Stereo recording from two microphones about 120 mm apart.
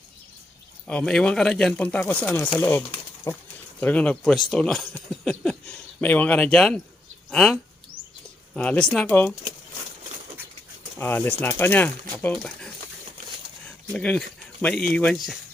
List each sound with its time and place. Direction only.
0.9 s speech: 10° left (ahead or behind)
3.3 s speech: 25° left (ahead or behind)
3.8 s speech: 10° left (ahead or behind)
9.0 s speech: 20° left (ahead or behind)
10.9 s speech: 20° left (ahead or behind)
13.9 s speech: 10° left (ahead or behind)